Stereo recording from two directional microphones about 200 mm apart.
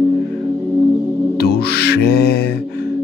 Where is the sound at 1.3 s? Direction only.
55° left (ahead or behind).